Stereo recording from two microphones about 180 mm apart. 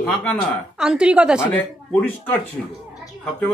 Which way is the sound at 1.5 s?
10° left (ahead or behind).